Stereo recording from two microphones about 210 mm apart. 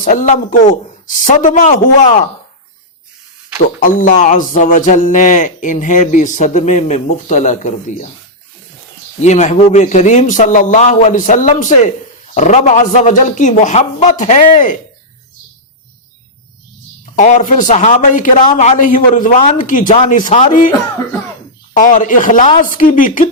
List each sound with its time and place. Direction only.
0.0 s speech: 35° left (ahead or behind)
3.8 s speech: 40° left (ahead or behind)
9.2 s speech: 35° left (ahead or behind)
17.2 s speech: 35° left (ahead or behind)
21.7 s speech: 40° left (ahead or behind)